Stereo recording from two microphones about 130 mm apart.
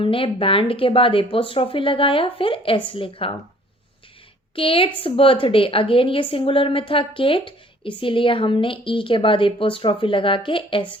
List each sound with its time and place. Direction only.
0.0 s speech: 45° left (ahead or behind)
4.5 s a woman's voice: 45° left (ahead or behind)